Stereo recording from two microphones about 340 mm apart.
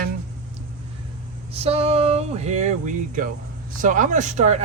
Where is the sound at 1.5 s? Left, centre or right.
Centre.